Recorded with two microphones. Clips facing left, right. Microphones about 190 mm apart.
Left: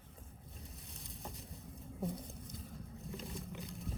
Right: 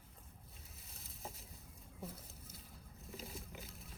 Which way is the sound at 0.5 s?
Centre (ahead or behind).